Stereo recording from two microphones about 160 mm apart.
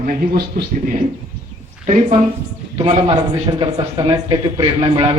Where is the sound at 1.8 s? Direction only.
50° right (ahead or behind).